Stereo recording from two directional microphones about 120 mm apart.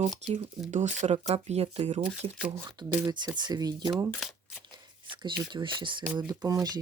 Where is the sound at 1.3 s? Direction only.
60° right (ahead or behind).